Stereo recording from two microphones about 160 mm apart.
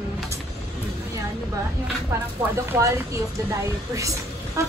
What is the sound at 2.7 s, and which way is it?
A woman's voice, 20° right (ahead or behind).